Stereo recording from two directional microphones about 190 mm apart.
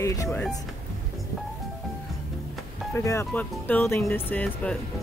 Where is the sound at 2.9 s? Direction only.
15° left (ahead or behind).